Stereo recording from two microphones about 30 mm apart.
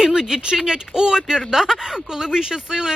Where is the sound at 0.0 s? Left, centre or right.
Centre.